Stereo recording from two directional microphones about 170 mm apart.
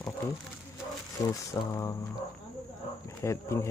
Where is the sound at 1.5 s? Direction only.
20° left (ahead or behind).